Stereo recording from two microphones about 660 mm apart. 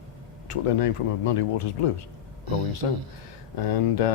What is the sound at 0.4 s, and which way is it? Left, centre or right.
Speech, left.